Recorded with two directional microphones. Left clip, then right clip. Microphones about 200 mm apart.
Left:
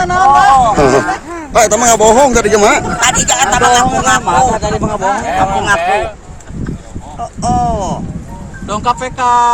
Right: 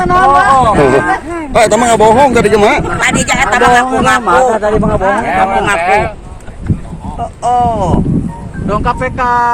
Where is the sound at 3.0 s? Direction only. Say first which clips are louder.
Even; 10° right (ahead or behind).